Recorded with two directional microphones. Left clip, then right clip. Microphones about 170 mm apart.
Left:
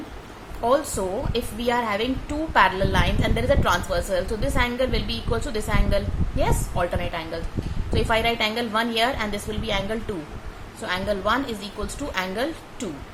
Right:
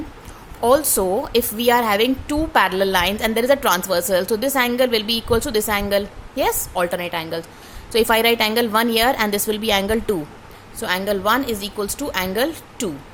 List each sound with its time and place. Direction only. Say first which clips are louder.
0.6 s a woman's voice: right 5 dB; 60° right (ahead or behind)